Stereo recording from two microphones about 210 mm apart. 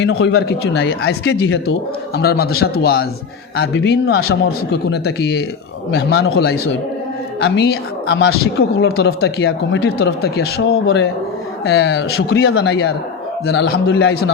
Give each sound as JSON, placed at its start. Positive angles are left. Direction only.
{"t": 0.0, "sound": "speech", "side_deg": 60}